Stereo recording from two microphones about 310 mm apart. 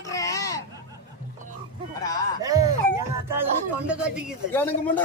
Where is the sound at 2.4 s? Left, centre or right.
Centre.